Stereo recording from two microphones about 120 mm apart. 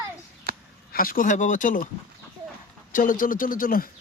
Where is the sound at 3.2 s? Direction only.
90° left.